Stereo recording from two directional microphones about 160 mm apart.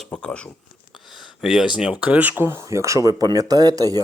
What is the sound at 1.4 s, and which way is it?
Speech, 5° right (ahead or behind).